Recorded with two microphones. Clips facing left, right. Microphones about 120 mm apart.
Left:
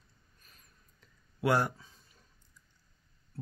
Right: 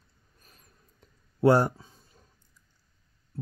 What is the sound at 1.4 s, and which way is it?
Speech, 40° right (ahead or behind).